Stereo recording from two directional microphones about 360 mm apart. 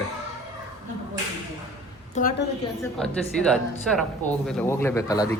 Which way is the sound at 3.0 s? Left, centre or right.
Centre.